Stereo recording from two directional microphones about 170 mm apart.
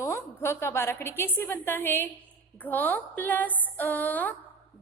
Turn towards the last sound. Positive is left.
turn(degrees=10)  # may be behind; listen again after turning